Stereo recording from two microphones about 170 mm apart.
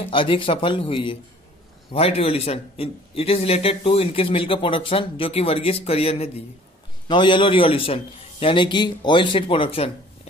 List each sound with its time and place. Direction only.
0.1 s a man's voice: 30° left (ahead or behind)